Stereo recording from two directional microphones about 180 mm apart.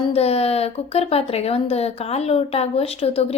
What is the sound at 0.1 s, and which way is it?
Speech, 35° left (ahead or behind).